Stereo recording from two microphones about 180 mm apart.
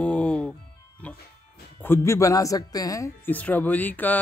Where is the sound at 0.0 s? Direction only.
5° left (ahead or behind).